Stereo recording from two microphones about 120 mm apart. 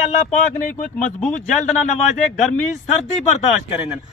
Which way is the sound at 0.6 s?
90° left.